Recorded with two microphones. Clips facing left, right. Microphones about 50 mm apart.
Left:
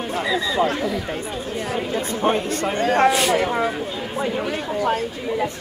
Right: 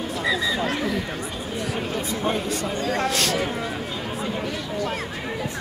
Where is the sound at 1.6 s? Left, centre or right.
Left.